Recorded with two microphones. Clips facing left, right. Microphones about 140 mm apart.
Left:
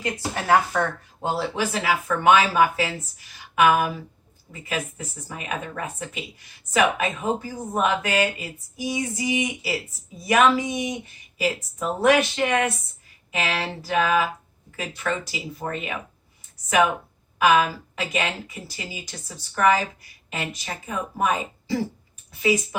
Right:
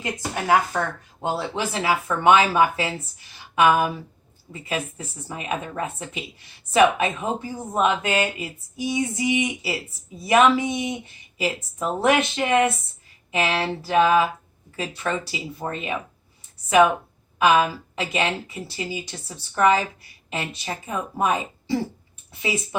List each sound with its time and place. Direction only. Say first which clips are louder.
0.0 s speech: even; 15° right (ahead or behind)
3.3 s a sound: right 1 dB; 25° right (ahead or behind)
4.5 s speech: right 1 dB; 30° right (ahead or behind)
17.3 s a woman's voice: right 1 dB; 25° right (ahead or behind)